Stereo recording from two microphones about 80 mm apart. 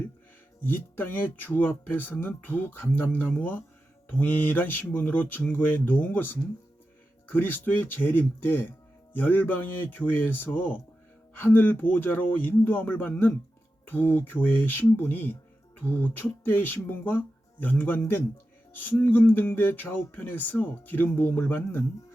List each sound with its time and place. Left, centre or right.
0.6 s speech: left